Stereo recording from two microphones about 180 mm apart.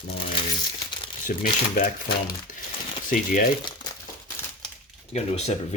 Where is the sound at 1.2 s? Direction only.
50° left (ahead or behind).